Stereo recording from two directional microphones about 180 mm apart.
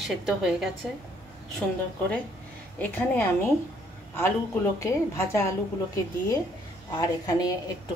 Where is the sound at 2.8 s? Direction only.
10° left (ahead or behind).